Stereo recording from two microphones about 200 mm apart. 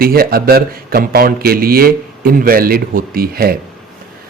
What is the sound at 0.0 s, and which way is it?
A man's voice, 50° right (ahead or behind).